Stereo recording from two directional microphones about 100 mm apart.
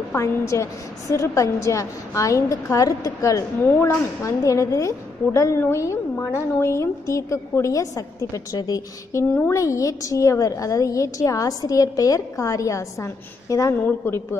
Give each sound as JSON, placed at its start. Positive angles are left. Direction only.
{"t": 0.1, "sound": "a woman's voice", "side_deg": 30}
{"t": 13.8, "sound": "a woman's voice", "side_deg": 20}